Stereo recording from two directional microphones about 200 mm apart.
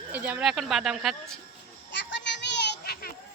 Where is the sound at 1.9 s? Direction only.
65° left (ahead or behind).